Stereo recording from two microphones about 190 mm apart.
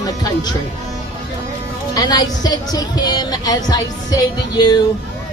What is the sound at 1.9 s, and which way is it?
Speech, 20° left (ahead or behind).